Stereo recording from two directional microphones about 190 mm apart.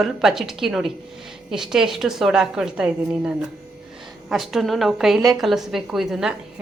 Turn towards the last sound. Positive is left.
turn(degrees=0)  # may be behind; listen again after turning